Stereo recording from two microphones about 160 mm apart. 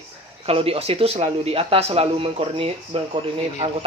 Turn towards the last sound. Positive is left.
turn(degrees=-35)  # may be behind; listen again after turning